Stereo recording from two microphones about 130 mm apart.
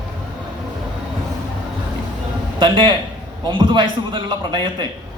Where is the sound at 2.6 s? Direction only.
40° right (ahead or behind).